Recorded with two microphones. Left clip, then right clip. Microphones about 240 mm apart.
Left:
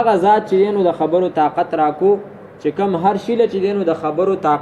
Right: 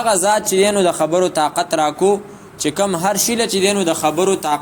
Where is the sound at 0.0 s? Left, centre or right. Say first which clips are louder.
Left 2 dB; right.